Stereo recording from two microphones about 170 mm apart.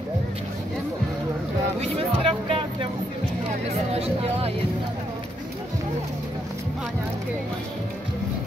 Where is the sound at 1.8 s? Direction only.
35° right (ahead or behind).